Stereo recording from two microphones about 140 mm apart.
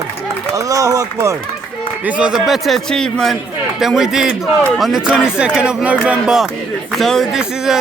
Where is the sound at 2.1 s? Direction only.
10° right (ahead or behind).